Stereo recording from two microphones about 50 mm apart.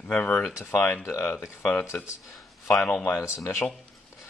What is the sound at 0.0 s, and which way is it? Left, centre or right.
Speech, left.